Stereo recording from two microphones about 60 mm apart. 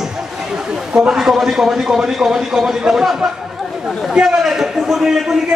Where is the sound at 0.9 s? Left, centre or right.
Centre.